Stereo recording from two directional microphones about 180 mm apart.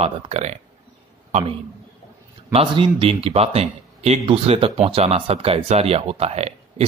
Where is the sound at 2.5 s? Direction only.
30° right (ahead or behind).